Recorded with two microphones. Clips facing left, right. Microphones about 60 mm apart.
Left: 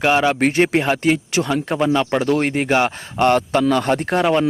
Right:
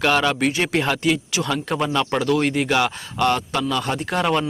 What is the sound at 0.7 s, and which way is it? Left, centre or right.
Speech, left.